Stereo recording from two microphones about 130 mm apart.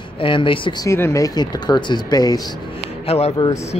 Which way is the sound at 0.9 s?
20° left (ahead or behind).